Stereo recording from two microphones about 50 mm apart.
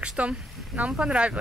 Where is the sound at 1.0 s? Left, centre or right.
Right.